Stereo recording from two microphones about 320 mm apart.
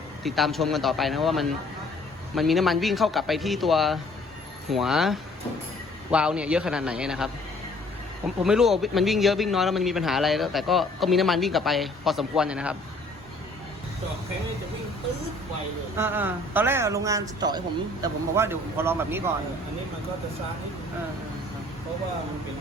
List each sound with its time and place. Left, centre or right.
0.2 s speech: centre
8.4 s speech: centre
16.0 s a man's voice: centre